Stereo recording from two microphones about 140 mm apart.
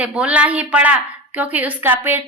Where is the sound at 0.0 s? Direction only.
10° right (ahead or behind).